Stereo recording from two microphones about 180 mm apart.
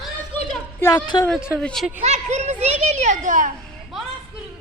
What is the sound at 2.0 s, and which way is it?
A child's voice, 40° right (ahead or behind).